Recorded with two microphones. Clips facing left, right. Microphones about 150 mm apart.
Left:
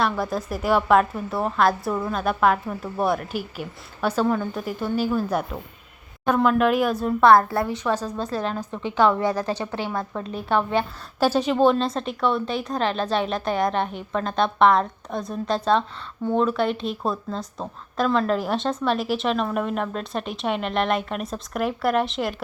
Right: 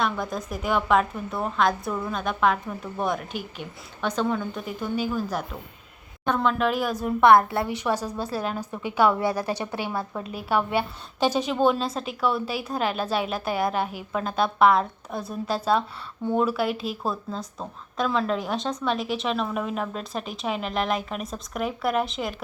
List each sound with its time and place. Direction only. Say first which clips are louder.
0.0 s a woman's voice: left 3 dB; 5° left (ahead or behind)
6.2 s a woman's voice: left 4 dB; 5° left (ahead or behind)
7.0 s a woman's voice: even; 20° right (ahead or behind)
7.7 s a woman's voice: left 2 dB; 10° right (ahead or behind)